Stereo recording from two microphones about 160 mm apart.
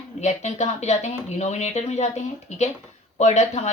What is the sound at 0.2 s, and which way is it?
Speech, 45° left (ahead or behind).